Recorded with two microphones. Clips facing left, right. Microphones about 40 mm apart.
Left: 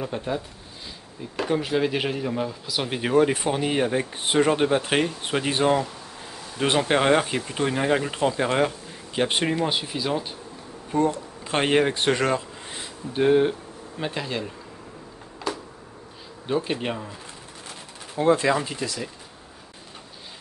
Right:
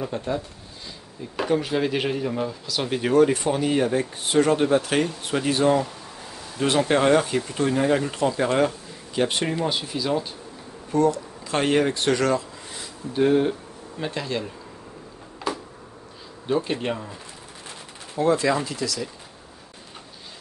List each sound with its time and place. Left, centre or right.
0.1 s speech: centre
1.3 s speech: centre; by 5.8 s left
6.9 s speech: left
13.1 s speech: centre
15.4 s a sound: centre
16.5 s speech: centre
18.1 s speech: left